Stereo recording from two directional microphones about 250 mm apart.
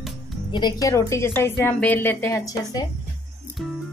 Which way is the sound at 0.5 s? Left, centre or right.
Centre.